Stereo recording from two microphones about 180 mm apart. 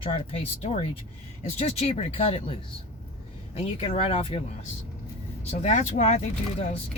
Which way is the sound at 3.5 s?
35° left (ahead or behind).